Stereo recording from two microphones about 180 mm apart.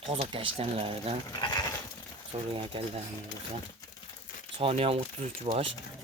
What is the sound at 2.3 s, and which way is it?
Speech, 35° right (ahead or behind).